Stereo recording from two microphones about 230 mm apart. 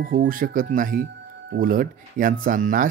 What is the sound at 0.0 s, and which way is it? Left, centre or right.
Speech, right.